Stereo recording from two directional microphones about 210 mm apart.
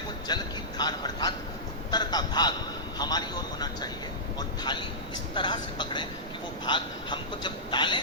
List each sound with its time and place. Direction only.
0.3 s vehicle: 20° left (ahead or behind)
0.8 s speech: 20° left (ahead or behind)